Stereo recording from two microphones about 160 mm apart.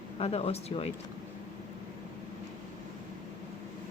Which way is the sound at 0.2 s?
40° left (ahead or behind).